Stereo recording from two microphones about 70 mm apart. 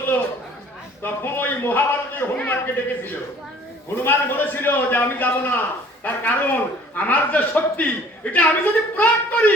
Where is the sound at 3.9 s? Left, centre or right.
Left.